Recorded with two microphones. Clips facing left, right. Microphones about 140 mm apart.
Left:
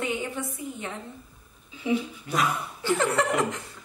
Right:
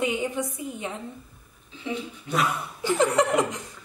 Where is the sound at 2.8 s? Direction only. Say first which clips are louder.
Right 3 dB; 15° right (ahead or behind).